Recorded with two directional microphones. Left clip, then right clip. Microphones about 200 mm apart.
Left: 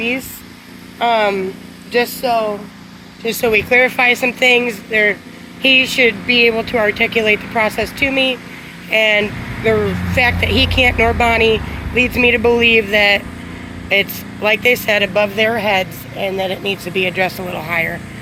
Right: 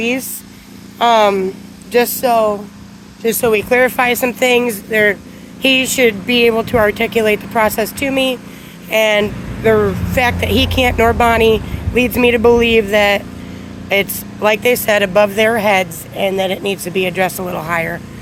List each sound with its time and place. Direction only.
0.0 s speech: 30° right (ahead or behind)
3.4 s speech: 20° right (ahead or behind)